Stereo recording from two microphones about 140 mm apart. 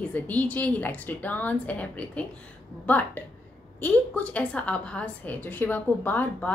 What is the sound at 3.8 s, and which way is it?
Speech, 10° left (ahead or behind).